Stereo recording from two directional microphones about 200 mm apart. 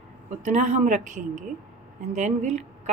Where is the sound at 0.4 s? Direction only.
35° right (ahead or behind).